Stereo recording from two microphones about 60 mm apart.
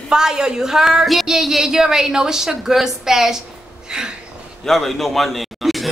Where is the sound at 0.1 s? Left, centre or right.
Centre.